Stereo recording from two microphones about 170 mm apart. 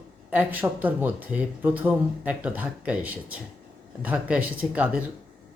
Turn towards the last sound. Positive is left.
turn(degrees=-5)  # may be behind; listen again after turning